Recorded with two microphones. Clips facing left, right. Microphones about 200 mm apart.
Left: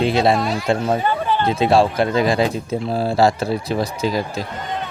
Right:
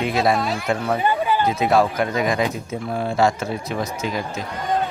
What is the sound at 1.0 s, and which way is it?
Chatter, 10° right (ahead or behind).